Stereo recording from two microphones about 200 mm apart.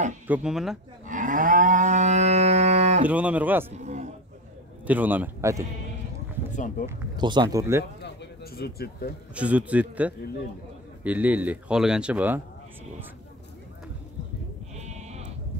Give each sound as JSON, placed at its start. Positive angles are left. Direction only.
{"t": 0.3, "sound": "speech", "side_deg": -5}
{"t": 1.0, "sound": "moo", "side_deg": -40}
{"t": 3.1, "sound": "speech", "side_deg": -5}
{"t": 3.7, "sound": "a sound", "side_deg": -35}
{"t": 4.8, "sound": "speech", "side_deg": -10}
{"t": 6.5, "sound": "speech", "side_deg": 40}
{"t": 6.9, "sound": "speech", "side_deg": -20}
{"t": 8.0, "sound": "a sound", "side_deg": 55}
{"t": 9.3, "sound": "speech", "side_deg": -5}
{"t": 14.8, "sound": "sheep", "side_deg": -35}